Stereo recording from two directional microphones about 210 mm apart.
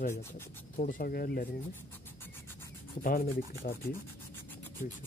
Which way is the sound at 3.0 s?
45° left (ahead or behind).